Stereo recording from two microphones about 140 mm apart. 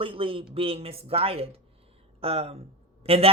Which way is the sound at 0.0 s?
40° right (ahead or behind).